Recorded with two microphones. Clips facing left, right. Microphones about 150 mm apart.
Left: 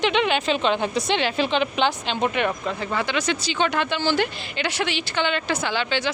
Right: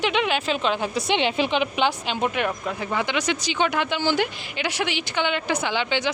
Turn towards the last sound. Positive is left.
turn(degrees=-15)  # may be behind; listen again after turning